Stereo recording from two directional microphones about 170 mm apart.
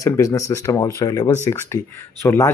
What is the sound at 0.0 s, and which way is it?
A man's voice, 20° left (ahead or behind).